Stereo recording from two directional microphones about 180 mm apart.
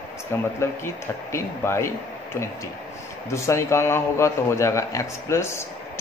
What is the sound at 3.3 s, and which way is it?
Speech, 15° left (ahead or behind).